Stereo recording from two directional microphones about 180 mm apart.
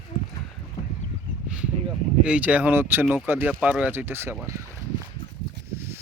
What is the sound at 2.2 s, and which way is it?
Speech, 5° right (ahead or behind).